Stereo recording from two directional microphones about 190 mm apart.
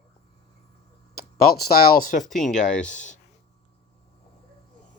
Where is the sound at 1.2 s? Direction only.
55° left (ahead or behind).